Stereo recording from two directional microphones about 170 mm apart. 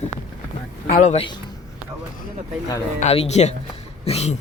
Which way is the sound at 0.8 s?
55° left (ahead or behind).